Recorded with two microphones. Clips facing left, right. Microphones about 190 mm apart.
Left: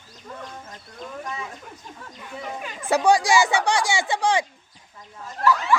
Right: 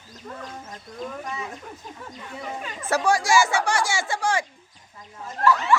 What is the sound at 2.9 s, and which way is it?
Speech, 15° left (ahead or behind).